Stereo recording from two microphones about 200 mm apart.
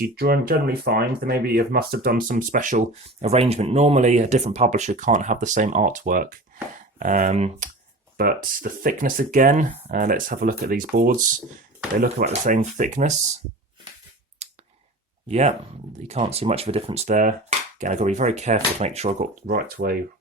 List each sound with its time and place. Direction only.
0.0 s speech: 50° right (ahead or behind)
12.2 s speech: 35° right (ahead or behind)
14.4 s clicking: 35° right (ahead or behind)
15.3 s speech: 35° right (ahead or behind)
19.5 s speech: 50° right (ahead or behind)